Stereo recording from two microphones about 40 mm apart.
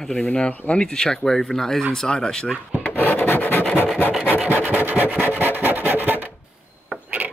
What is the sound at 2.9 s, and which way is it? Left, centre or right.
Rub, left.